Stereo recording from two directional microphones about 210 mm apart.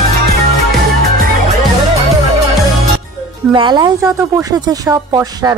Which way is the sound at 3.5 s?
20° right (ahead or behind).